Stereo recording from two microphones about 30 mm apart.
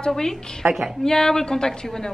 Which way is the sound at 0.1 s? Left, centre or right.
Centre.